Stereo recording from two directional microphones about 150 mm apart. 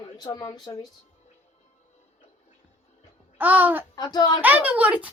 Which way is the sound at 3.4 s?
10° right (ahead or behind).